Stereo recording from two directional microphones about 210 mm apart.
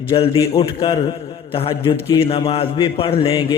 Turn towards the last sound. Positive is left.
turn(degrees=25)  # may be behind; listen again after turning